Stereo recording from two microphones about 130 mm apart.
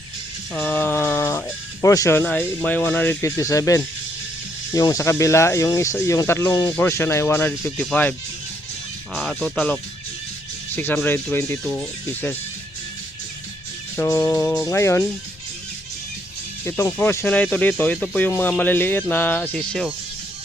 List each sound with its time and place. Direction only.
0.5 s music: 15° left (ahead or behind)
1.9 s speech: 25° left (ahead or behind)
3.2 s speech: 25° left (ahead or behind)
9.1 s speech: 5° left (ahead or behind)
10.8 s speech: 15° left (ahead or behind)
13.9 s speech: 20° left (ahead or behind)
16.6 s speech: 20° left (ahead or behind)